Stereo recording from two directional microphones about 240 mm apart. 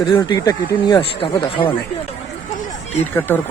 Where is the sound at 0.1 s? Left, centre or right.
Centre.